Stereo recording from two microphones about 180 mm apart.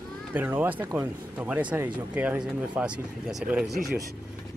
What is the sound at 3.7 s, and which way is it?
Speech, 60° right (ahead or behind).